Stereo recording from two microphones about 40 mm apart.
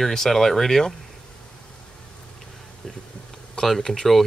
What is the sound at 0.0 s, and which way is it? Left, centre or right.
Speech, centre.